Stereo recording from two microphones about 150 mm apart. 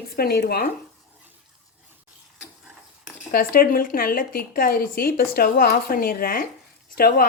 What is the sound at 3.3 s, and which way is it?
Speech, 75° left (ahead or behind).